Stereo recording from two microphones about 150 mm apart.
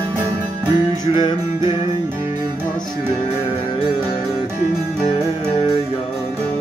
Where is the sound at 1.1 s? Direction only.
30° left (ahead or behind).